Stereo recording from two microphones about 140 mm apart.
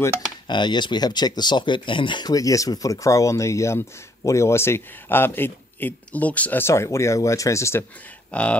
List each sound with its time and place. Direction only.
0.5 s speech: 35° left (ahead or behind)
8.3 s speech: 10° left (ahead or behind)